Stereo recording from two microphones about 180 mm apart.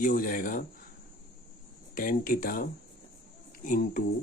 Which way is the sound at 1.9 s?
50° left (ahead or behind).